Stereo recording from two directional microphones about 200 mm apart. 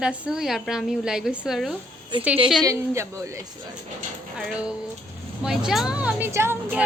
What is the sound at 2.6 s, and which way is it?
A woman's voice, 15° right (ahead or behind).